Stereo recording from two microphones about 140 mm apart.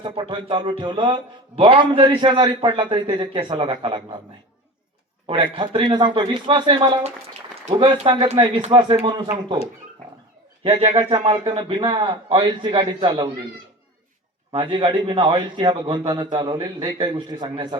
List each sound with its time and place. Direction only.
0.0 s speech: 35° right (ahead or behind)
5.2 s speech: 40° right (ahead or behind)
10.6 s speech: 40° right (ahead or behind)
14.5 s speech: 35° right (ahead or behind)